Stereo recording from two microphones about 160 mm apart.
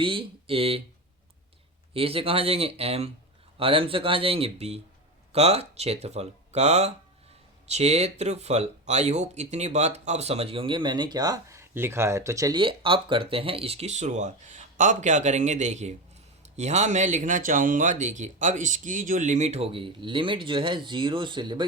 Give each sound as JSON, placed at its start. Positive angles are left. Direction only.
{"t": 0.0, "sound": "speech", "side_deg": -35}
{"t": 1.9, "sound": "speech", "side_deg": -35}